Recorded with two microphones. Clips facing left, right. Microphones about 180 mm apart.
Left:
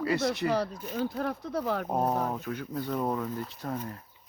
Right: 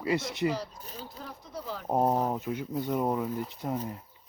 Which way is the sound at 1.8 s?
25° right (ahead or behind).